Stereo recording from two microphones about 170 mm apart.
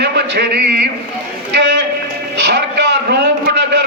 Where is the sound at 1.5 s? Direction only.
90° right.